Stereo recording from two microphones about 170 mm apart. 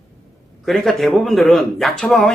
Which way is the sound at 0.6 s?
Centre (ahead or behind).